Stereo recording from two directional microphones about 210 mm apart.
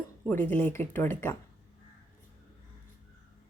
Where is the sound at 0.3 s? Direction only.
10° left (ahead or behind).